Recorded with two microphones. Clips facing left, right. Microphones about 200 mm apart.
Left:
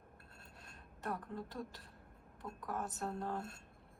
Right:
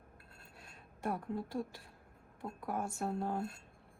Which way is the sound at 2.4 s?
25° right (ahead or behind).